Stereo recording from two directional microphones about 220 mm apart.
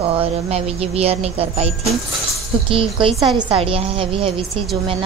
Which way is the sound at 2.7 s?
25° right (ahead or behind).